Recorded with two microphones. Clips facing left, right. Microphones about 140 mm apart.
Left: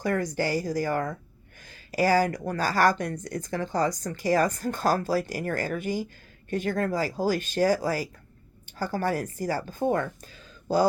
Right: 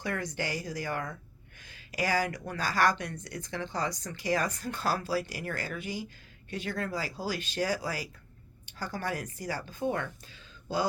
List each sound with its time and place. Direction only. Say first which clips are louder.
0.0 s speech: left 7 dB; 45° left (ahead or behind)